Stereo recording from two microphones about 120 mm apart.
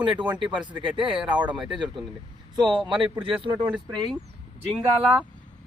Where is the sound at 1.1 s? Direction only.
10° right (ahead or behind).